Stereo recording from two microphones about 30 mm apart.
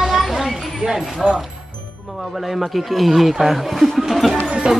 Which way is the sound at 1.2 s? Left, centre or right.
Right.